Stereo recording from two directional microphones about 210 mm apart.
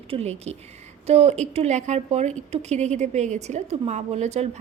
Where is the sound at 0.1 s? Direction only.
30° right (ahead or behind).